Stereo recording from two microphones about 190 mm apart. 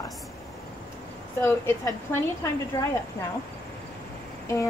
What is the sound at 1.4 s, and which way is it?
Speech, 15° left (ahead or behind).